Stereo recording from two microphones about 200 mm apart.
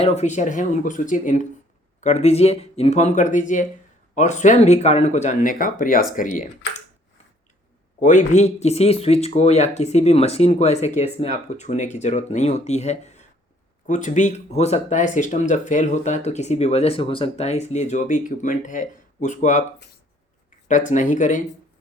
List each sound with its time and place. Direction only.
0.0 s speech: 35° left (ahead or behind)
8.0 s speech: 35° left (ahead or behind)
20.7 s speech: 40° left (ahead or behind)